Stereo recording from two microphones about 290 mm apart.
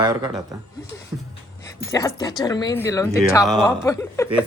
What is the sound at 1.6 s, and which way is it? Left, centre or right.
Speech, centre.